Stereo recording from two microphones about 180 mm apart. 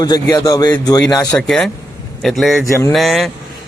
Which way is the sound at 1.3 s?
5° left (ahead or behind).